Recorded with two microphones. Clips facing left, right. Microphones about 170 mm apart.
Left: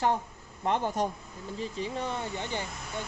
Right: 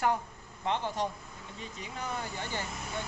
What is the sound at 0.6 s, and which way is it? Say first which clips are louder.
Speech: left 4 dB; 45° left (ahead or behind).